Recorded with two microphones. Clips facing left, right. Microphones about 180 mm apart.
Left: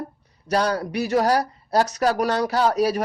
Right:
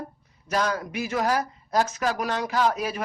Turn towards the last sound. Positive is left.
turn(degrees=40)  # may be behind; listen again after turning